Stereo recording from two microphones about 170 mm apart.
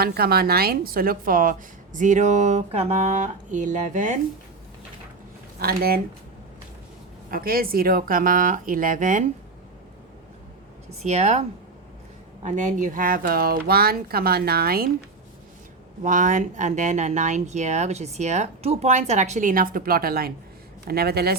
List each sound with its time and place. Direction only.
0.0 s speech: 65° right (ahead or behind); by 4.2 s 50° right (ahead or behind)
5.5 s speech: 60° right (ahead or behind)
7.3 s speech: 55° right (ahead or behind)
11.0 s speech: 40° right (ahead or behind)
12.5 s speech: 50° right (ahead or behind); by 14.8 s 65° right (ahead or behind)
16.0 s speech: 50° right (ahead or behind); by 21.3 s 65° right (ahead or behind)